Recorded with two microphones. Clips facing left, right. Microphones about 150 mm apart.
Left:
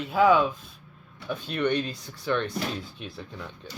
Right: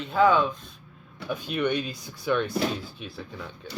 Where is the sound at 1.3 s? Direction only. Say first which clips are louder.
Even; 10° right (ahead or behind).